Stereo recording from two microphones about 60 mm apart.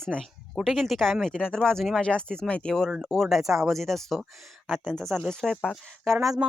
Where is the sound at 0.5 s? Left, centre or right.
Centre.